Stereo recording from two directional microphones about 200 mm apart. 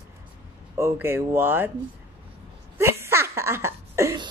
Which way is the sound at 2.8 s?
15° right (ahead or behind).